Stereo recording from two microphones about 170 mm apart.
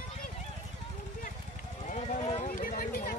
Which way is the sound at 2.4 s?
55° left (ahead or behind).